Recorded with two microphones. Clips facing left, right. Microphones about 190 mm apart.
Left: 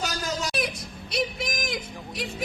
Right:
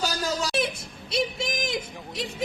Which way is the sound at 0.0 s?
30° right (ahead or behind).